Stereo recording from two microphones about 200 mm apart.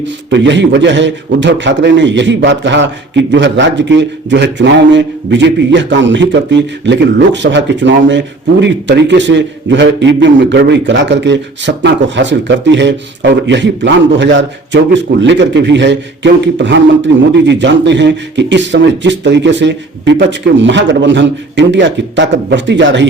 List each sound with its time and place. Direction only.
0.0 s a man's voice: 65° right (ahead or behind)